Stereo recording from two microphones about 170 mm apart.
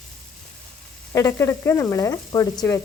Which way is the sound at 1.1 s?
15° left (ahead or behind).